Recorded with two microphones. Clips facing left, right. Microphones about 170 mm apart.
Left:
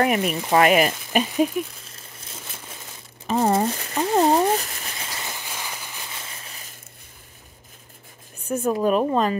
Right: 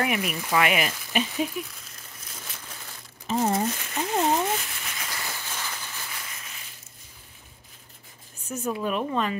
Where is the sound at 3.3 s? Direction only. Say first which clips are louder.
Left 4 dB; 60° left (ahead or behind).